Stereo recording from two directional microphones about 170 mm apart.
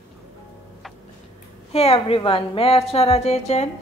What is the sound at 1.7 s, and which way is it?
A woman's voice, 35° left (ahead or behind).